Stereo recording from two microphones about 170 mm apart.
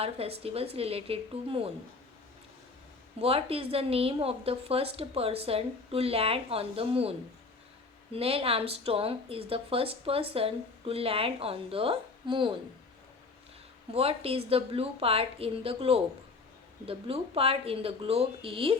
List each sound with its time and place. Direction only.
0.0 s speech: 35° right (ahead or behind)
3.2 s speech: 35° right (ahead or behind)
8.1 s speech: 35° right (ahead or behind)
13.9 s speech: 35° right (ahead or behind)